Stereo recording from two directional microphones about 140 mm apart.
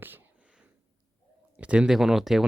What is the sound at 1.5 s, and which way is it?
Speech, 10° right (ahead or behind).